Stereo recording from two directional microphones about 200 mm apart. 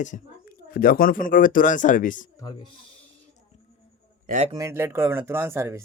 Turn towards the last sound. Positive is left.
turn(degrees=-15)  # may be behind; listen again after turning